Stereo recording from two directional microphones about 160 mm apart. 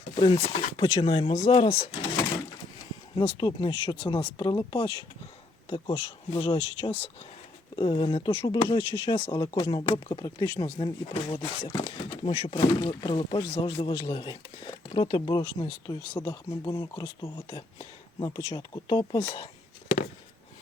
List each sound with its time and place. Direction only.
0.2 s speech: 35° left (ahead or behind)
3.2 s speech: 30° left (ahead or behind)
12.5 s speech: 25° left (ahead or behind)